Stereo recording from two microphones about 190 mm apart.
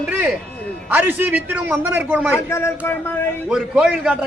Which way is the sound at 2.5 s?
15° left (ahead or behind).